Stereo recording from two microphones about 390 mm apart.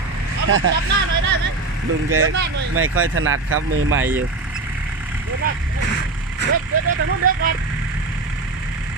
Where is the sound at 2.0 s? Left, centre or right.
Right.